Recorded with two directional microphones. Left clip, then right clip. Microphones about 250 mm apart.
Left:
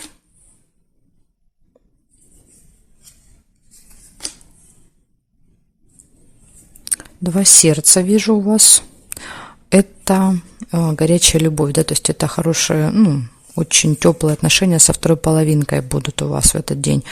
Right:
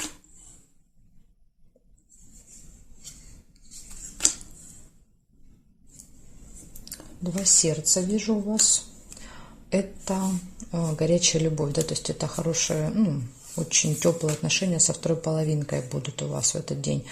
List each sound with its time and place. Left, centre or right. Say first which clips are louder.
6.8 s speech: left 12 dB; left
9.0 s a sound: left 14 dB; left
10.7 s speech: left 8 dB; left